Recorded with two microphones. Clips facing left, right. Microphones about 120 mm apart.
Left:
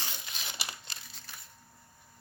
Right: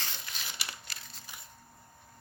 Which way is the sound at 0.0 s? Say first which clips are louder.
Even; 20° left (ahead or behind).